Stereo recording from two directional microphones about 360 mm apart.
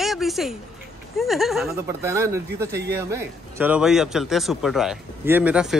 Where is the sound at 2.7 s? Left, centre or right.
Right.